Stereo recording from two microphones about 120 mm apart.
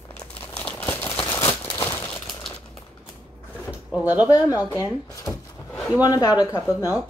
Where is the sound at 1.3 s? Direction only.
20° left (ahead or behind).